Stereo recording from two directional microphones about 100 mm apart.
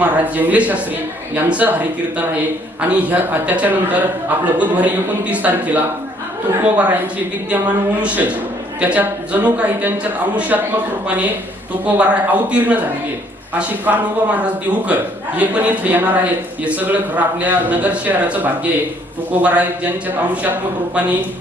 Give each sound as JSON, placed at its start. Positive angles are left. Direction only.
{"t": 0.0, "sound": "a man's voice", "side_deg": -15}
{"t": 2.9, "sound": "a man's voice", "side_deg": -15}
{"t": 11.9, "sound": "a man's voice", "side_deg": -15}